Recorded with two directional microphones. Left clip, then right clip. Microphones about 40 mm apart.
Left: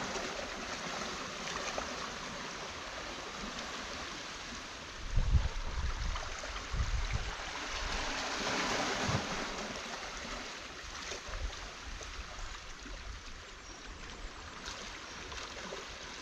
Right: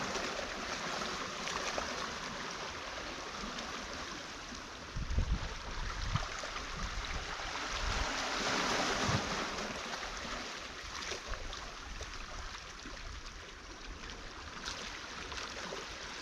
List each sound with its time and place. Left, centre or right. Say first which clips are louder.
0.0 s boat: right 1 dB; right
6.1 s stream: right 2 dB; right
7.0 s waves: even; right
10.9 s boat: right 2 dB; right
15.4 s a sound: right 1 dB; right